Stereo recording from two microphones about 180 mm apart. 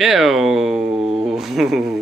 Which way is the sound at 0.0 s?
Centre (ahead or behind).